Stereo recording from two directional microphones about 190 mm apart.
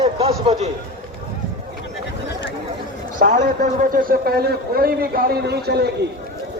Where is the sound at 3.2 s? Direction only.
40° right (ahead or behind); by 5.9 s 60° right (ahead or behind).